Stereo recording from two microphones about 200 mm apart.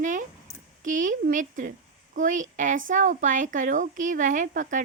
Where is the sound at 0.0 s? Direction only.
40° right (ahead or behind).